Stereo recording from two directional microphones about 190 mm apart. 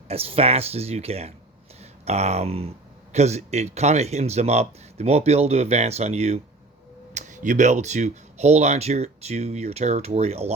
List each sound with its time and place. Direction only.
0.1 s speech: 30° right (ahead or behind)